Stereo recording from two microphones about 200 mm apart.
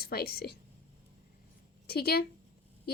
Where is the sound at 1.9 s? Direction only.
50° left (ahead or behind).